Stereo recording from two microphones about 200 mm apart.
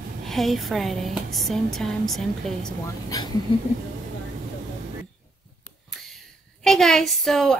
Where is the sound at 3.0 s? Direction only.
20° left (ahead or behind).